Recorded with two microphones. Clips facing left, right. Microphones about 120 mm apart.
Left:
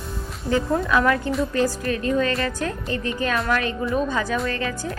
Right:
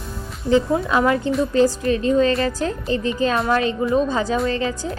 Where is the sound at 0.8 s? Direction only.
25° right (ahead or behind).